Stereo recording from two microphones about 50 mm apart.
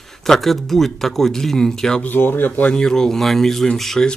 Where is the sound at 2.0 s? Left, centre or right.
Left.